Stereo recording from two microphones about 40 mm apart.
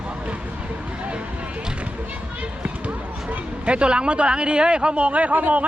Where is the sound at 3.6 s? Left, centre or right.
Right.